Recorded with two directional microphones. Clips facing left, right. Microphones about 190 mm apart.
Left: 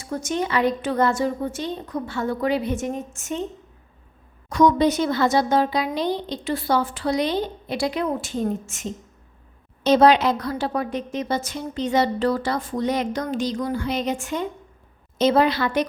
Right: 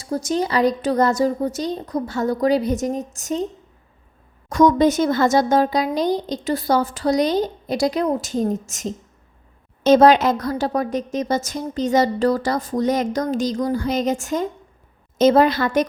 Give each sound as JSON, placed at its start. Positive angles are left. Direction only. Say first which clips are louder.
{"t": 0.0, "sound": "a woman's voice", "louder": "right 4 dB", "side_deg": -35}
{"t": 4.4, "sound": "a woman's voice", "louder": "right 3 dB", "side_deg": -45}